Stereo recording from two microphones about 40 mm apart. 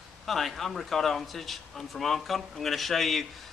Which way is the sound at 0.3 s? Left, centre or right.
Centre.